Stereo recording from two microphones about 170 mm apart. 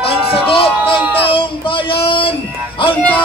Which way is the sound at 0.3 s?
35° left (ahead or behind).